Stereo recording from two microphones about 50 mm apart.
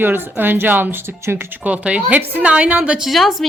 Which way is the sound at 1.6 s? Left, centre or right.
Right.